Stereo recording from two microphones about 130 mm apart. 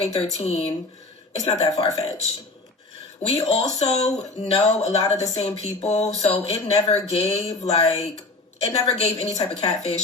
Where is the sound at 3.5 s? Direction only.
60° left (ahead or behind).